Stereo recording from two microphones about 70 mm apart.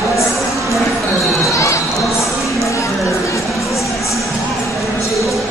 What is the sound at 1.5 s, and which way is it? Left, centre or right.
Crowd, left.